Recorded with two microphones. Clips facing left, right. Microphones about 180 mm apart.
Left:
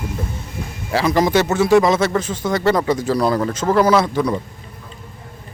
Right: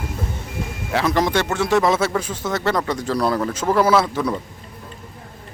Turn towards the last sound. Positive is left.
turn(degrees=0)  # may be behind; listen again after turning